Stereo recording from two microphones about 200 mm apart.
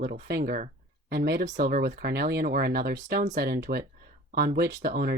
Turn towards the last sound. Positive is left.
turn(degrees=-50)  # may be behind; listen again after turning